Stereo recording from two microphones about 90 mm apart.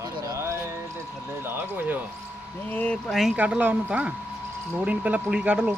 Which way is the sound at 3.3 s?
15° right (ahead or behind).